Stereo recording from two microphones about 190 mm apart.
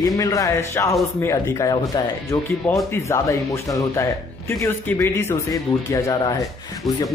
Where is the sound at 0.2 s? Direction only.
15° left (ahead or behind).